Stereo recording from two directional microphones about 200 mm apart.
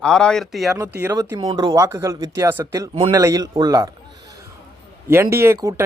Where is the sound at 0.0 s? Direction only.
5° left (ahead or behind).